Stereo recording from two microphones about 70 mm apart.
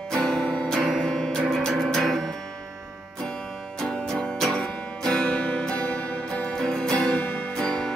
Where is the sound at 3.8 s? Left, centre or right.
Centre.